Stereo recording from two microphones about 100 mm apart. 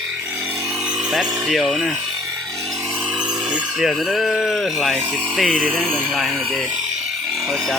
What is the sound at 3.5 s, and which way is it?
Speech, 5° right (ahead or behind).